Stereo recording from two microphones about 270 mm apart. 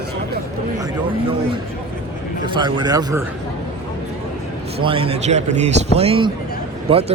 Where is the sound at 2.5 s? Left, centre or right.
Centre.